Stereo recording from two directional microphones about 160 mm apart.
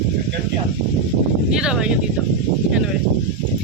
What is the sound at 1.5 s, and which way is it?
Speech, 5° right (ahead or behind).